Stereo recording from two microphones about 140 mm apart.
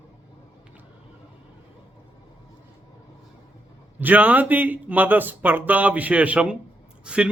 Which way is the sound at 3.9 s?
10° right (ahead or behind).